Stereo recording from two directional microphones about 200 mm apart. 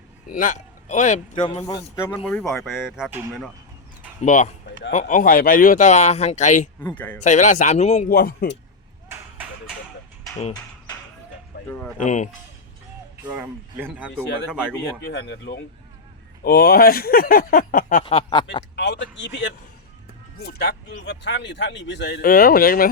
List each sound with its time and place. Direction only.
0.3 s speech: 40° left (ahead or behind)
2.2 s speech: centre (ahead or behind)
4.2 s speech: 40° left (ahead or behind)
6.7 s speech: 10° left (ahead or behind)
7.2 s speech: 35° left (ahead or behind)
8.1 s speech: 50° left (ahead or behind)
9.0 s a sound: 10° right (ahead or behind)
11.7 s speech: 10° left (ahead or behind)
12.0 s speech: 35° left (ahead or behind)
13.3 s speech: 10° right (ahead or behind)
15.0 s speech: 55° left (ahead or behind)
18.0 s snicker: 25° left (ahead or behind)
18.8 s speech: 60° left (ahead or behind); by 22.9 s 45° left (ahead or behind)